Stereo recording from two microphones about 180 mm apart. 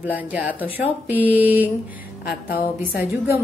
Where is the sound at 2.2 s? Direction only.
55° left (ahead or behind).